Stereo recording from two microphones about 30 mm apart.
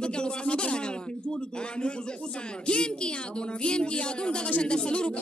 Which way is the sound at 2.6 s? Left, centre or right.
Left.